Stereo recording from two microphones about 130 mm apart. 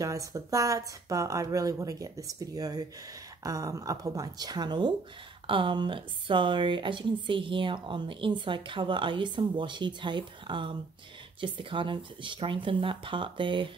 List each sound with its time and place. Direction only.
0.0 s speech: 25° right (ahead or behind)